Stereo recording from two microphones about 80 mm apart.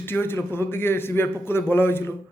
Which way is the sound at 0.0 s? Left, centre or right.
Left.